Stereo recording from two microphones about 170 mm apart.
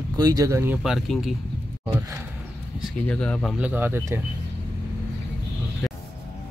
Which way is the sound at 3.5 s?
10° right (ahead or behind).